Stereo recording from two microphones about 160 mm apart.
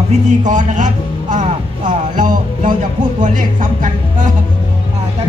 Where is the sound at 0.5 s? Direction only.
50° right (ahead or behind).